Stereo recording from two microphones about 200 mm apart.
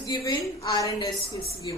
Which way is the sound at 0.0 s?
20° left (ahead or behind).